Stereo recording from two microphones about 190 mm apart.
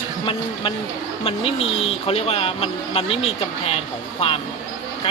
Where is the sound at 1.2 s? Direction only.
30° left (ahead or behind).